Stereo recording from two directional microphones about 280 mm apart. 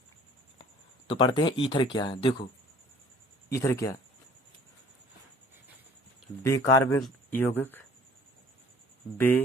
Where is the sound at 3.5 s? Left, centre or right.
Centre.